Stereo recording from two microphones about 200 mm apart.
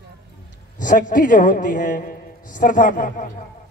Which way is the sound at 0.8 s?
40° left (ahead or behind).